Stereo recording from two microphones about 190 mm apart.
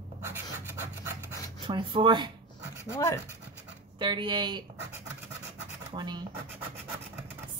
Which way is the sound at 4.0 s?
25° right (ahead or behind).